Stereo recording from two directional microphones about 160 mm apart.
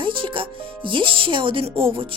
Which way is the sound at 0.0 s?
30° right (ahead or behind).